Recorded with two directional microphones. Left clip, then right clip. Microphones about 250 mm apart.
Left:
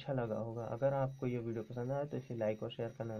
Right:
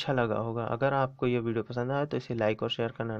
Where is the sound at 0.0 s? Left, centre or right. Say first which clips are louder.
Right 10 dB; right.